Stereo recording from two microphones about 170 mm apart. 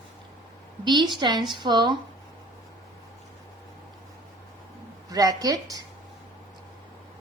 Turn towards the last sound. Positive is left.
turn(degrees=-20)  # may be behind; listen again after turning